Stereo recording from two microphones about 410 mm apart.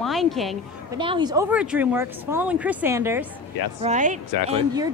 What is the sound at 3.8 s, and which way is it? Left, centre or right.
Speech, centre.